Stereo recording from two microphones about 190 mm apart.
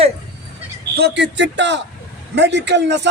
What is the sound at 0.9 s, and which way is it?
A man's voice, 60° right (ahead or behind).